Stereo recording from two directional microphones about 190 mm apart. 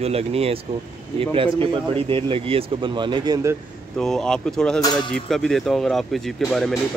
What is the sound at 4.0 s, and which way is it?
Speech, 5° left (ahead or behind).